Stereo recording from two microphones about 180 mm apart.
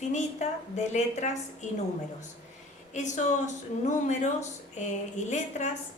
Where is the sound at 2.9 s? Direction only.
40° left (ahead or behind).